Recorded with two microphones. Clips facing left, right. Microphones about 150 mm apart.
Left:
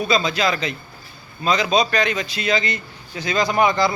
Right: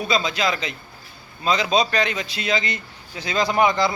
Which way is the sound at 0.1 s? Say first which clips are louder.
Left 1 dB; 20° right (ahead or behind).